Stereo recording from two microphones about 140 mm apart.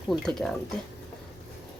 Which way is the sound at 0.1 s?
5° left (ahead or behind).